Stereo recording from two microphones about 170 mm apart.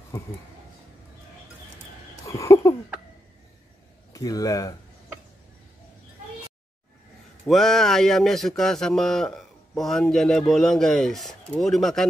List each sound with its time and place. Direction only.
2.2 s a sound: 20° left (ahead or behind)
4.1 s speech: 20° left (ahead or behind)
7.4 s speech: centre (ahead or behind)